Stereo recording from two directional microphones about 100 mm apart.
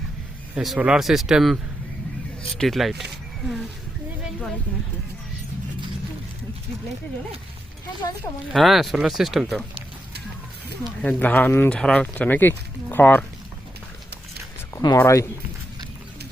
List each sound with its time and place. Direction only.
0.5 s speech: centre (ahead or behind)
2.6 s speech: centre (ahead or behind)
8.5 s speech: centre (ahead or behind)
11.0 s speech: 15° left (ahead or behind)
14.8 s speech: 40° left (ahead or behind)